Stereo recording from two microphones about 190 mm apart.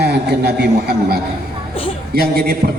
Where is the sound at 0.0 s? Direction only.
60° right (ahead or behind).